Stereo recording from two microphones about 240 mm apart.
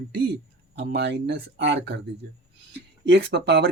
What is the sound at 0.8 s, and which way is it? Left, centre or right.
Speech, right.